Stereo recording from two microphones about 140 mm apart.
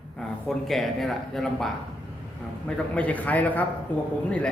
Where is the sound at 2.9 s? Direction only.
10° left (ahead or behind).